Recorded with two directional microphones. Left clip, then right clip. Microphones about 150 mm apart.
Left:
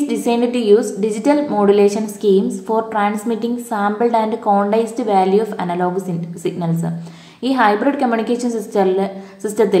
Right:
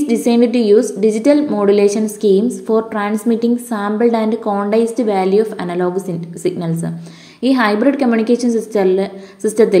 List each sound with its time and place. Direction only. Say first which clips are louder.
0.0 s a woman's voice: right 3 dB; 30° right (ahead or behind)